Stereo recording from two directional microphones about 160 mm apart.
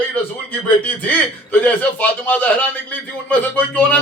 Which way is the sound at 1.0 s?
10° left (ahead or behind).